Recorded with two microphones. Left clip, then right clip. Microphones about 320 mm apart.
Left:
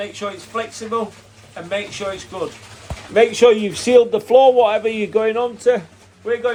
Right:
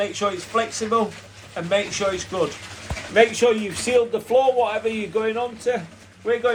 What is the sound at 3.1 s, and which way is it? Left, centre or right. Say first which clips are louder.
A man's voice: left 5 dB; left.